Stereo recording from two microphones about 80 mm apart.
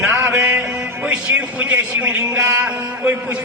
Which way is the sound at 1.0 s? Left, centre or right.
Centre.